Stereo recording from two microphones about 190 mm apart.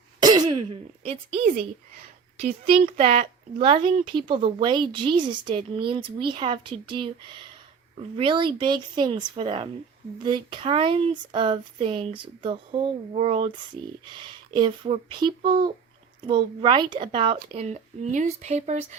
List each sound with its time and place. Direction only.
0.2 s speech: 20° right (ahead or behind)
2.4 s speech: 35° right (ahead or behind)